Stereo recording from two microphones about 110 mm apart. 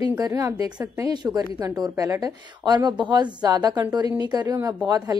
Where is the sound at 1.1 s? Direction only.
40° right (ahead or behind).